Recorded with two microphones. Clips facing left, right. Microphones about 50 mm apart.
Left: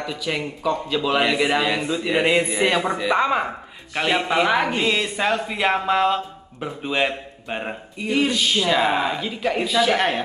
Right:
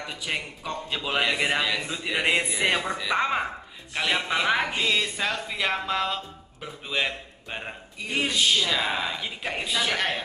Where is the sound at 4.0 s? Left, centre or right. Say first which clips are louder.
Left 5 dB; centre.